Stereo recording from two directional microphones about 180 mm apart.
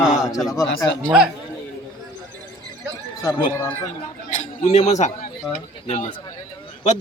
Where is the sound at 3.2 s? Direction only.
15° left (ahead or behind).